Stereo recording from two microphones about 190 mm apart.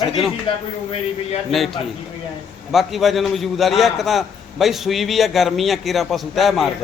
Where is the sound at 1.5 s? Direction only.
Centre (ahead or behind).